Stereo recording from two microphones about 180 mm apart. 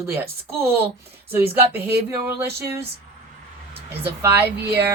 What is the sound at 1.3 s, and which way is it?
Speech, 10° right (ahead or behind).